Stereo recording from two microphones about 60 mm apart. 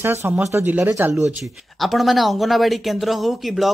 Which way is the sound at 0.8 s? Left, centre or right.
Right.